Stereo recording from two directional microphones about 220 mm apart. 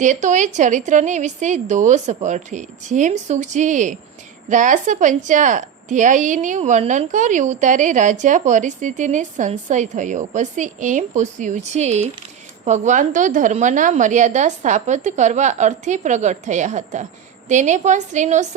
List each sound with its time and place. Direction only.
0.0 s a woman's voice: 35° right (ahead or behind)